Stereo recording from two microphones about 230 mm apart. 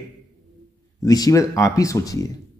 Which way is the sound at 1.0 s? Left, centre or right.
Centre.